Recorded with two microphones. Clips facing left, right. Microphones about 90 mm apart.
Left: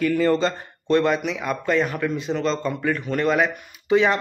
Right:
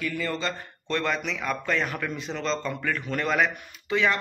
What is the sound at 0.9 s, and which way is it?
Speech, 15° left (ahead or behind).